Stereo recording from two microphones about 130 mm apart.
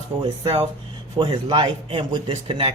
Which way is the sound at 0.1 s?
45° right (ahead or behind).